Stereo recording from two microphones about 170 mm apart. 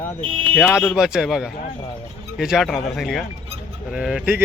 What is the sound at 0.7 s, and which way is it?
Speech, centre (ahead or behind).